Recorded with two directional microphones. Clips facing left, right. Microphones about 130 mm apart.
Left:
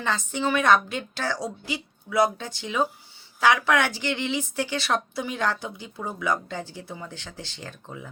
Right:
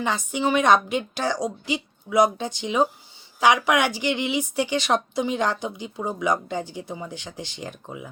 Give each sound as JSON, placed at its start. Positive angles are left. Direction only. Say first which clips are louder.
{"t": 0.0, "sound": "speech", "louder": "right 2 dB", "side_deg": -15}